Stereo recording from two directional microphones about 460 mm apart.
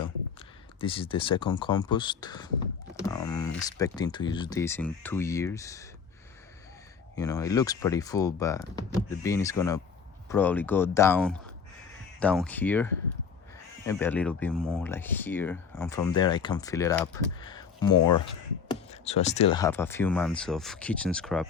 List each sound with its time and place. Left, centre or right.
0.0 s speech: centre
7.2 s speech: centre
17.9 s speech: left
18.9 s speech: centre